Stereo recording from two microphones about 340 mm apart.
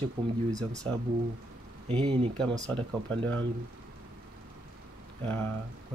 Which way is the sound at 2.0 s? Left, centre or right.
Centre.